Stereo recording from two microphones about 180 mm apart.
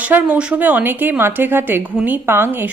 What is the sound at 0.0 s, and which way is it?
Speech, 10° right (ahead or behind).